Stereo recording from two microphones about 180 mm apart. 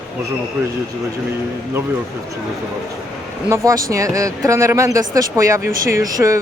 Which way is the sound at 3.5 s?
15° right (ahead or behind).